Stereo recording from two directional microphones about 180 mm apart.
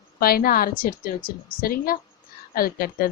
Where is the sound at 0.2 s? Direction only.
55° left (ahead or behind).